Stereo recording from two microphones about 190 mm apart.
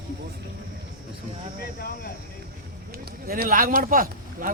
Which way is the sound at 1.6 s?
50° left (ahead or behind).